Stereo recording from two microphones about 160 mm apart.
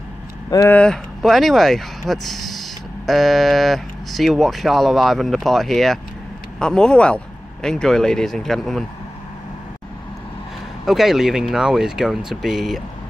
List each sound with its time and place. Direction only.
0.5 s speech: 20° left (ahead or behind)
0.7 s speech: 5° left (ahead or behind)
10.9 s speech: centre (ahead or behind)